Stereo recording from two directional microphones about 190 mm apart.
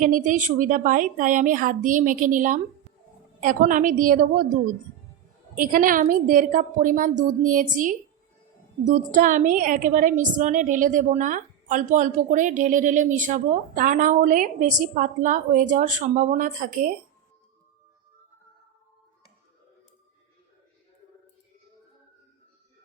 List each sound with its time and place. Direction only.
0.0 s a woman's voice: 45° right (ahead or behind)
5.5 s a woman's voice: 45° right (ahead or behind)